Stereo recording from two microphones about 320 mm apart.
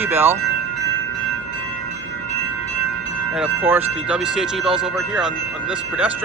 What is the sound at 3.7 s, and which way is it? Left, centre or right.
Speech, centre.